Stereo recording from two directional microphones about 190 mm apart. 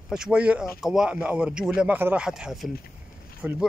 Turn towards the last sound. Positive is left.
turn(degrees=-5)  # may be behind; listen again after turning